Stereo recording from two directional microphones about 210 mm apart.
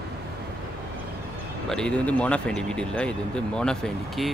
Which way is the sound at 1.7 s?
5° left (ahead or behind).